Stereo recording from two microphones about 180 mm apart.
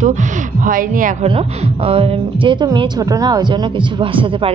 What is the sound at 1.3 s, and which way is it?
A woman's voice, 30° right (ahead or behind).